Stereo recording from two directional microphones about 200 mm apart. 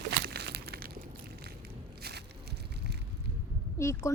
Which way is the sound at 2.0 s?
55° right (ahead or behind).